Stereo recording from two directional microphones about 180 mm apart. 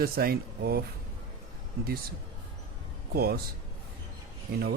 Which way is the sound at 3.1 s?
60° right (ahead or behind).